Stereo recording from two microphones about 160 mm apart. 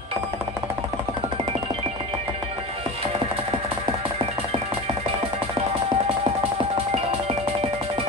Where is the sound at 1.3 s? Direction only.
35° right (ahead or behind).